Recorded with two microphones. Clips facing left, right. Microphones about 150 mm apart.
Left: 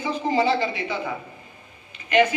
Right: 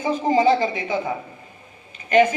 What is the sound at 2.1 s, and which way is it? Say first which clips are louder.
Speech: right 3 dB; 45° right (ahead or behind).